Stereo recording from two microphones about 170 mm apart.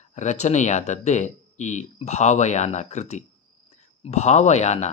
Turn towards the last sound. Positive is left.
turn(degrees=40)  # may be behind; listen again after turning